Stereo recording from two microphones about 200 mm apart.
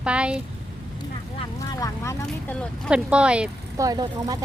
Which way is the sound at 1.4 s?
20° left (ahead or behind).